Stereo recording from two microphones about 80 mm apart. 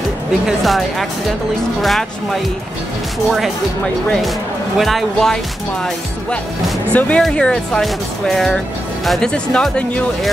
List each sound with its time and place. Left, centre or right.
0.5 s speech: centre
4.7 s speech: centre
6.9 s speech: centre
9.3 s speech: centre